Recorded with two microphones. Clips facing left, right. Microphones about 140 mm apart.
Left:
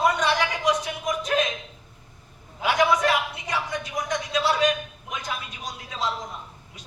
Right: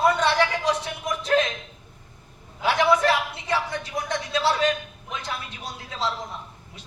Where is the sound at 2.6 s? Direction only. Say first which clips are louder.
Right 1 dB; 30° right (ahead or behind).